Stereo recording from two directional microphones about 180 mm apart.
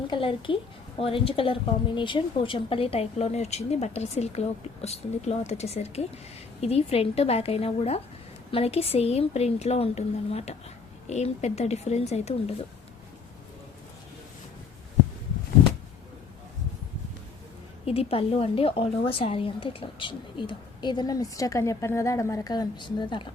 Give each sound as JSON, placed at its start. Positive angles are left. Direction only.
{"t": 0.1, "sound": "a woman's voice", "side_deg": 30}
{"t": 17.8, "sound": "a woman's voice", "side_deg": 35}